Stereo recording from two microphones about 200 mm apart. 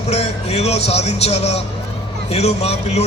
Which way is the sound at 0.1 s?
30° left (ahead or behind).